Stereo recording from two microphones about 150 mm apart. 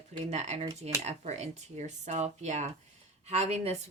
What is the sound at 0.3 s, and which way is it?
Speech, 45° right (ahead or behind).